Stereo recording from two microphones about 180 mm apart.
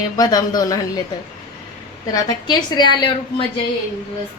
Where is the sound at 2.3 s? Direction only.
25° left (ahead or behind).